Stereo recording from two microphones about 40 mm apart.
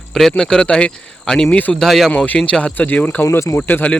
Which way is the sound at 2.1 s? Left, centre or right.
Left.